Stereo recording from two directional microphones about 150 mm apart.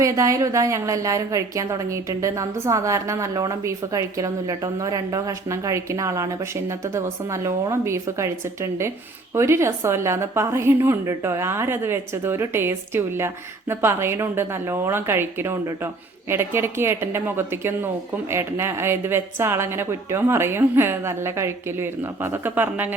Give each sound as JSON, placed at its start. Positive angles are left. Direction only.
{"t": 0.0, "sound": "a woman's voice", "side_deg": -20}